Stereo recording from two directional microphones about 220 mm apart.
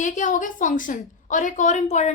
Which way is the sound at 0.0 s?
35° left (ahead or behind).